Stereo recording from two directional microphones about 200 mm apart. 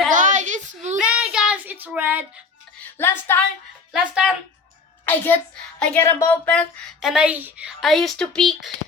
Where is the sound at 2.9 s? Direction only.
10° left (ahead or behind).